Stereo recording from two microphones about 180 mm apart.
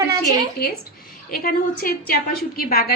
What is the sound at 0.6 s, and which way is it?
A woman's voice, 60° left (ahead or behind).